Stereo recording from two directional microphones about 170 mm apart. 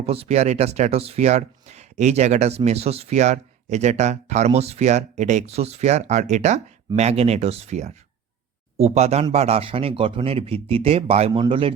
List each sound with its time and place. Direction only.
0.0 s speech: 35° right (ahead or behind)